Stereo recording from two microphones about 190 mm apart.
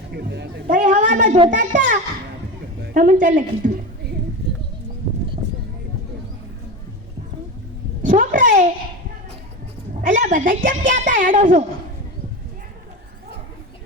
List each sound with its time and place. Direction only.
0.2 s speech: 60° right (ahead or behind)
0.7 s a woman's voice: 40° right (ahead or behind)
8.0 s a woman's voice: 45° right (ahead or behind)
10.0 s a woman's voice: 40° right (ahead or behind)